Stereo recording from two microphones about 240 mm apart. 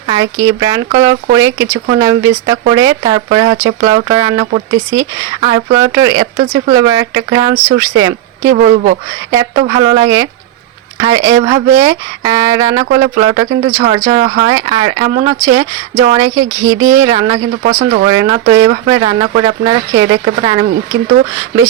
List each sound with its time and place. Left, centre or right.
0.1 s speech: centre
8.5 s speech: right
9.3 s speech: centre
17.6 s speech: right
18.1 s speech: centre